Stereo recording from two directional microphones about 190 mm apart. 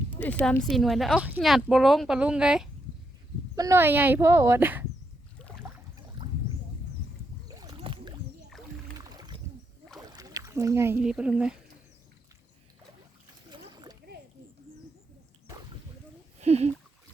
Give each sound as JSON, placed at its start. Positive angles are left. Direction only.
{"t": 0.1, "sound": "speech", "side_deg": 10}
{"t": 3.5, "sound": "speech", "side_deg": -15}
{"t": 7.4, "sound": "boat", "side_deg": -20}
{"t": 9.0, "sound": "rowboat", "side_deg": -20}
{"t": 10.1, "sound": "speech", "side_deg": -20}
{"t": 13.5, "sound": "splash", "side_deg": -20}
{"t": 16.4, "sound": "speech", "side_deg": -35}